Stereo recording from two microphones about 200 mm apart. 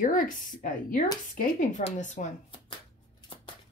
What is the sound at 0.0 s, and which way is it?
Speech, 40° left (ahead or behind).